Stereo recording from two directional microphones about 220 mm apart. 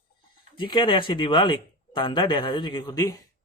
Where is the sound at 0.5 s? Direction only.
20° left (ahead or behind).